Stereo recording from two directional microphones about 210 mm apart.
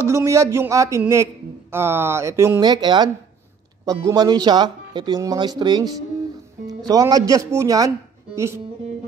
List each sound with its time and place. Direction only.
0.0 s a man's voice: 15° right (ahead or behind)